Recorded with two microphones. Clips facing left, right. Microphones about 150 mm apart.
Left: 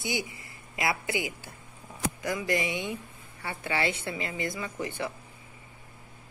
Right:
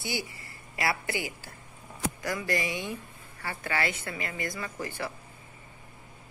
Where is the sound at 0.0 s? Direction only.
20° left (ahead or behind).